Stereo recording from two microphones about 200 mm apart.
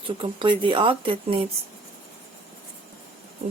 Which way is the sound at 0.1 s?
25° right (ahead or behind).